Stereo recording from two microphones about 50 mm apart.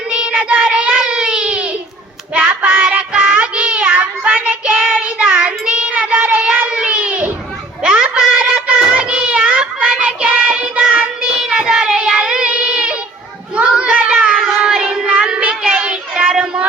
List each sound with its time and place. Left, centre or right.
0.1 s child singing: right
2.3 s hands: right
3.1 s child singing: right
7.8 s a sound: centre